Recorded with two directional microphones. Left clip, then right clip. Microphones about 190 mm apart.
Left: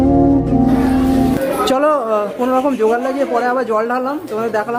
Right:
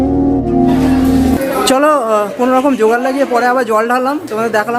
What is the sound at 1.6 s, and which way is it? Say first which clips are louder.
Speech: right 4 dB; 15° right (ahead or behind).